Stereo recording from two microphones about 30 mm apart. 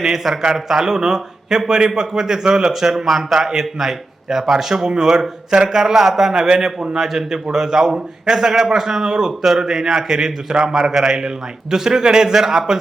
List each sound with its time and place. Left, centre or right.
0.0 s a man's voice: centre
2.9 s a man's voice: centre; by 5.7 s right
5.7 s a man's voice: centre